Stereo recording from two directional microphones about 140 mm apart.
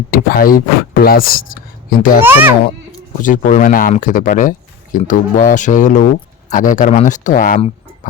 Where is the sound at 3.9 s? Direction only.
70° left (ahead or behind).